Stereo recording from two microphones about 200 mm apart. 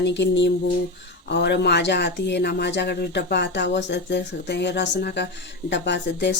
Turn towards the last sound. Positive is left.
turn(degrees=60)  # may be behind; listen again after turning